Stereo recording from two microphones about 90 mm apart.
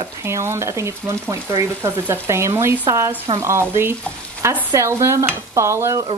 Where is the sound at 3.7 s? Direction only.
30° right (ahead or behind).